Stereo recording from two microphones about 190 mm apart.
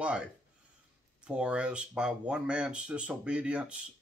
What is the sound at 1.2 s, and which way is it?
Speech, 5° right (ahead or behind).